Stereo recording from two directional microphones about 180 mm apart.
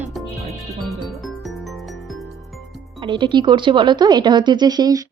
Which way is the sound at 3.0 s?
25° right (ahead or behind).